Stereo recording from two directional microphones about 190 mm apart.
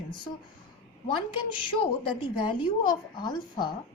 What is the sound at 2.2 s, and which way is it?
A woman's voice, 25° left (ahead or behind).